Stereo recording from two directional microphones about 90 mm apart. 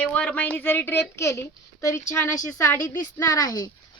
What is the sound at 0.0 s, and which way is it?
Speech, 15° left (ahead or behind).